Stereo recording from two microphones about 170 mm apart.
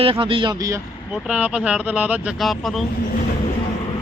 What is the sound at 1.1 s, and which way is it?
Speech, 5° right (ahead or behind).